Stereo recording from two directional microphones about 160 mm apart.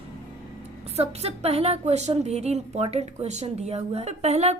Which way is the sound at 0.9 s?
40° right (ahead or behind).